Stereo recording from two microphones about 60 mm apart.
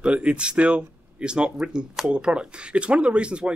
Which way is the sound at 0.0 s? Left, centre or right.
Centre.